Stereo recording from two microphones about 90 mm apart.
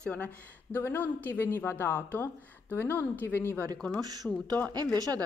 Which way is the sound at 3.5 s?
40° right (ahead or behind).